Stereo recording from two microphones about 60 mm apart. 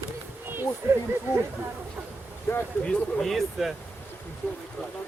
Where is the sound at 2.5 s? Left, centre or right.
Left.